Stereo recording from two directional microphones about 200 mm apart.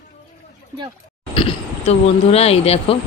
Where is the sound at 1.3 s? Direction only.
25° left (ahead or behind).